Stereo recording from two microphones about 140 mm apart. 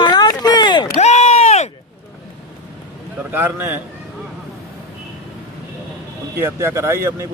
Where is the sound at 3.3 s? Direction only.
15° right (ahead or behind).